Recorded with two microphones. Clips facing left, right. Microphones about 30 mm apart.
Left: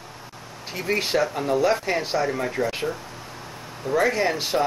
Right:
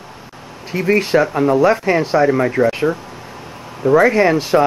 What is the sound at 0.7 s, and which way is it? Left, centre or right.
Speech, right.